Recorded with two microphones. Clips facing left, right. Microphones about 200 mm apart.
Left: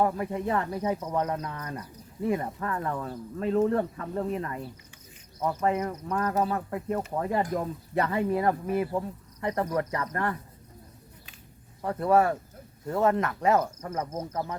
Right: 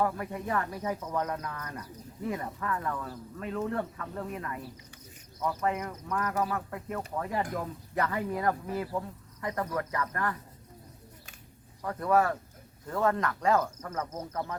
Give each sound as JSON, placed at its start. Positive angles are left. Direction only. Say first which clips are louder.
{"t": 0.0, "sound": "speech", "louder": "left 4 dB", "side_deg": 25}
{"t": 7.5, "sound": "speech", "louder": "left 5 dB", "side_deg": 25}
{"t": 11.8, "sound": "speech", "louder": "left 3 dB", "side_deg": 30}